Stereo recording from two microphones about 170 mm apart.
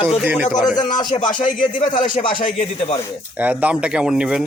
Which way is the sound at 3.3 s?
10° right (ahead or behind).